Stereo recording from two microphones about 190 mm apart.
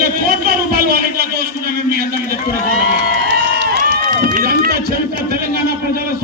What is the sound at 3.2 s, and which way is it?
Run, 65° right (ahead or behind).